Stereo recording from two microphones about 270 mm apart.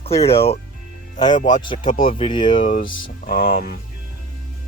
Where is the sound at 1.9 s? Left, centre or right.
Left.